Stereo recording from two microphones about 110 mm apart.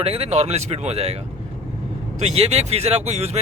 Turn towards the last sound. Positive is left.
turn(degrees=-80)